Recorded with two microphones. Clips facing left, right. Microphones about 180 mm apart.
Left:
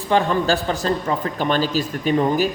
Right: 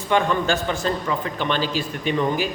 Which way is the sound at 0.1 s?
35° left (ahead or behind).